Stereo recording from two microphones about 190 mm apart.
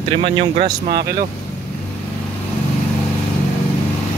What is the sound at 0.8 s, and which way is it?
Speech, 55° right (ahead or behind).